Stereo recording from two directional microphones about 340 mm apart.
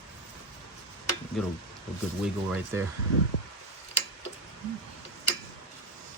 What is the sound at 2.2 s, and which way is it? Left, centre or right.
Speech, centre.